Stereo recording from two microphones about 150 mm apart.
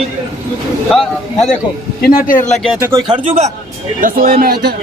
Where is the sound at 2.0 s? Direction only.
70° left (ahead or behind).